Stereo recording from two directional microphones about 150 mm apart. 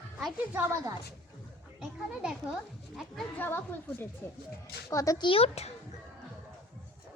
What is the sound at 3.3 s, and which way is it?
A woman's voice, 15° left (ahead or behind).